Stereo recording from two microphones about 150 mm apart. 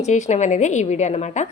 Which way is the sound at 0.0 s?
50° left (ahead or behind).